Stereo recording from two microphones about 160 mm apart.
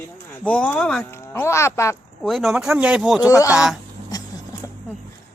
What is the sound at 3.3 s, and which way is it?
Speech, 20° left (ahead or behind).